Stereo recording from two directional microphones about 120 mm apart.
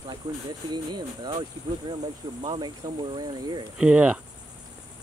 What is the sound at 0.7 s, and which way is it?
Speech, 35° right (ahead or behind).